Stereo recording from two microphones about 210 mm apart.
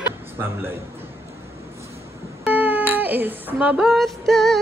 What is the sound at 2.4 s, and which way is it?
Music, 10° right (ahead or behind).